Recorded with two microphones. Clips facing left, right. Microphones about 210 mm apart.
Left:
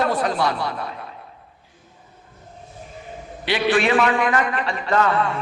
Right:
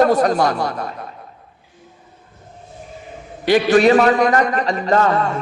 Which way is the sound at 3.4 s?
45° right (ahead or behind).